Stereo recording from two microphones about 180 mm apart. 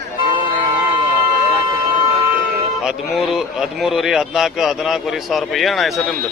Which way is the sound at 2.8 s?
Centre (ahead or behind).